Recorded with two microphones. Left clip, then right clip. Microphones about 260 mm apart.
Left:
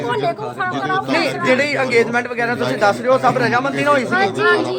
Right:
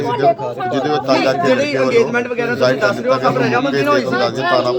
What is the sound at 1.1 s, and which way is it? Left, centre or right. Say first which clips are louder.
A man's voice: right 2 dB; centre.